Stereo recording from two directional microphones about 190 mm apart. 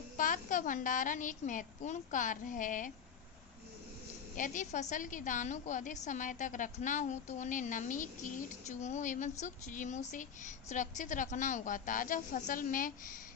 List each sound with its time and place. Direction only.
0.2 s a woman's voice: 45° left (ahead or behind)
4.4 s speech: 45° left (ahead or behind)